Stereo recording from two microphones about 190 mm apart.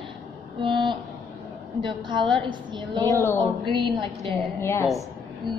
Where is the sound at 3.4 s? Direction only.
25° right (ahead or behind).